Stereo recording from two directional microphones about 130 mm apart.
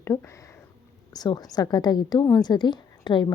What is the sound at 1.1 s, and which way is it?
A woman's voice, 30° left (ahead or behind).